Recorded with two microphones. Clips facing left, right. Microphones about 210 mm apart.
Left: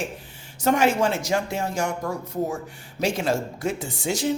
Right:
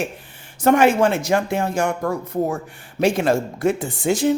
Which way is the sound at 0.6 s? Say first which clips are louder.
Right 5 dB; 55° right (ahead or behind).